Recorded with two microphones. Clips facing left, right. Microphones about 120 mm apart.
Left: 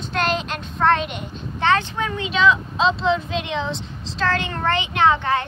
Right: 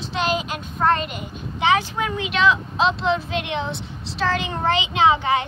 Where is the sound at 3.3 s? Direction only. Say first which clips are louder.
Even; 70° right (ahead or behind).